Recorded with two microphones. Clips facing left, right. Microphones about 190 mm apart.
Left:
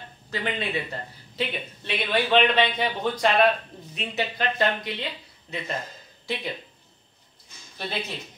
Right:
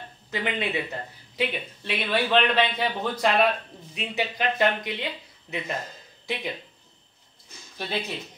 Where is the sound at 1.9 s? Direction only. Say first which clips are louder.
Left 1 dB; 5° right (ahead or behind).